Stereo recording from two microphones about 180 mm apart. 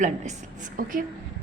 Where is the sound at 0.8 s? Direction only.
50° right (ahead or behind).